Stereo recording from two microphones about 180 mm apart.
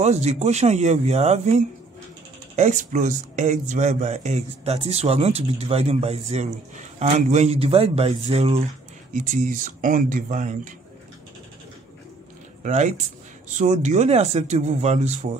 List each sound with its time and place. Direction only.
0.0 s speech: 40° right (ahead or behind)
9.1 s speech: 45° right (ahead or behind)
12.6 s speech: 40° right (ahead or behind)